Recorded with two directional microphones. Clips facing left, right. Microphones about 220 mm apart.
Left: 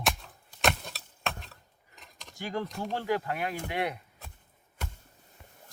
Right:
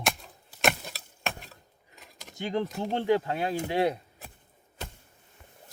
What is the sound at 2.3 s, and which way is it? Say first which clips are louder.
Speech: right 4 dB; 20° right (ahead or behind).